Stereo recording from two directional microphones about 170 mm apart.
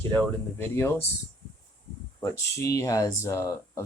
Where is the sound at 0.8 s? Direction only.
15° left (ahead or behind).